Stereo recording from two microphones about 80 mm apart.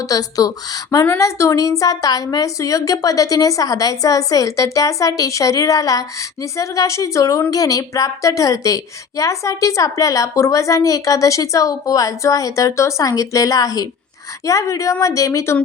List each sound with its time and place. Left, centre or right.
0.0 s a woman's voice: left
1.0 s a woman's voice: left